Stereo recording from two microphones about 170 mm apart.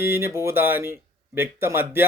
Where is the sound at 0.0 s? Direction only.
15° right (ahead or behind).